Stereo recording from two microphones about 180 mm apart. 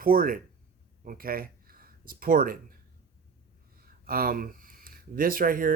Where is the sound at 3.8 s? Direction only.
55° right (ahead or behind).